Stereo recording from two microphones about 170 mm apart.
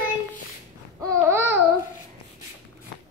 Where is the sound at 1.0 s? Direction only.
15° right (ahead or behind).